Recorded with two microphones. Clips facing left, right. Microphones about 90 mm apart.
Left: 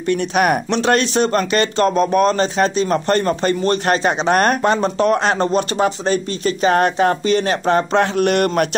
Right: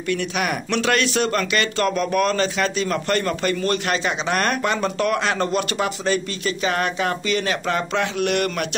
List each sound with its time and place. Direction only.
0.1 s speech: 45° left (ahead or behind)
0.7 s speech: 30° left (ahead or behind)